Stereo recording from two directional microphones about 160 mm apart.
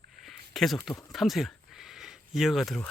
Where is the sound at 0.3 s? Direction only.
Centre (ahead or behind).